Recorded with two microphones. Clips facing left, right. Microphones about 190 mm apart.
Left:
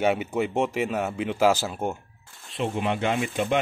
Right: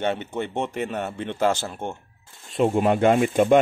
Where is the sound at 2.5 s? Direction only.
45° right (ahead or behind).